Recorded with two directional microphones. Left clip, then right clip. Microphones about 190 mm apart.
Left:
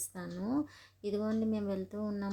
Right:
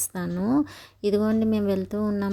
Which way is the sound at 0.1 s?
45° right (ahead or behind).